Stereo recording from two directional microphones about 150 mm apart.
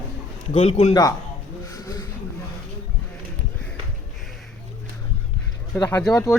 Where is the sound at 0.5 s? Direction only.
45° left (ahead or behind).